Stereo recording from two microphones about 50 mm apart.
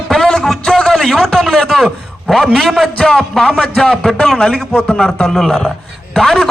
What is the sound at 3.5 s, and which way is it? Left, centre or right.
A man's voice, centre.